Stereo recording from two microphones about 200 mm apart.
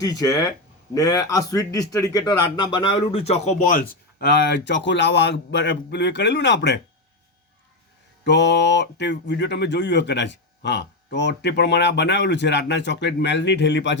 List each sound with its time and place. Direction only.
0.0 s speech: 20° left (ahead or behind); by 6.7 s 60° left (ahead or behind)
8.2 s speech: 60° left (ahead or behind)